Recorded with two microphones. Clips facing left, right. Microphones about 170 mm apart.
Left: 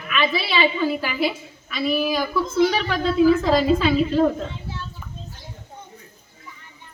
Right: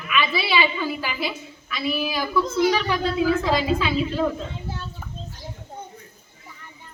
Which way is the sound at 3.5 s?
50° left (ahead or behind).